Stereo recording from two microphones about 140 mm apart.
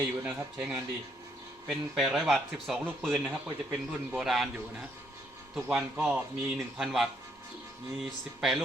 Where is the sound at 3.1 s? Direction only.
10° right (ahead or behind).